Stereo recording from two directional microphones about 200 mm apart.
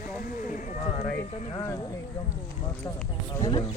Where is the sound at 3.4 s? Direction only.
25° left (ahead or behind).